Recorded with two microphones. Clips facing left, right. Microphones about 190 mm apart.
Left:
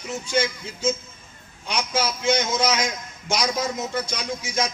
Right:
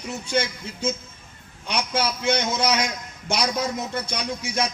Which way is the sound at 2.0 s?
60° right (ahead or behind).